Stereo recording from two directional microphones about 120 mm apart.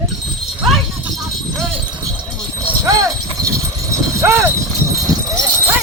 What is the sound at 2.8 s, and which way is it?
Clip-clop, 30° right (ahead or behind).